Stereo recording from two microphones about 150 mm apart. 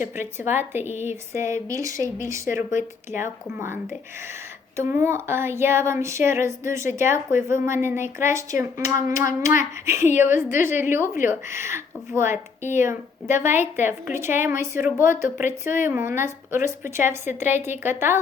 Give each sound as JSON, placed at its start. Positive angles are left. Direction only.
{"t": 0.0, "sound": "a woman's voice", "side_deg": -15}
{"t": 4.8, "sound": "speech", "side_deg": -15}